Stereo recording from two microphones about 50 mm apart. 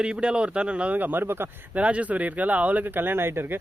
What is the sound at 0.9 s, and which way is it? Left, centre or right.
Speech, right.